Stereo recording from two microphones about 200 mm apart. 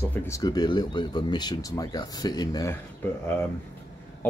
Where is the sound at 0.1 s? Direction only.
15° left (ahead or behind).